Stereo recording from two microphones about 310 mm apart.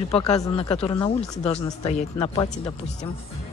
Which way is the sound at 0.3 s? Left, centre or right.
Centre.